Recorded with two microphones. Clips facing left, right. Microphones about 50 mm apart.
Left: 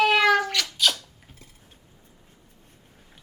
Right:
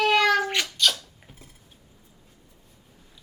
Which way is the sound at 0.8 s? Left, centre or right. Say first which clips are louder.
Left 1 dB; centre.